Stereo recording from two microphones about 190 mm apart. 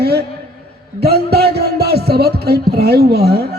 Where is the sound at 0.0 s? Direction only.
55° right (ahead or behind).